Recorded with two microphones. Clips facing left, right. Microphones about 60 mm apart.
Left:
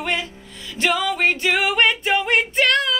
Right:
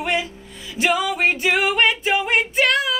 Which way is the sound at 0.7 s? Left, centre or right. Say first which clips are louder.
Right 1 dB; centre.